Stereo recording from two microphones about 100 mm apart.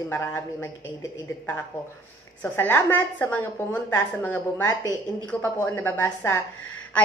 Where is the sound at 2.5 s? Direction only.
20° left (ahead or behind).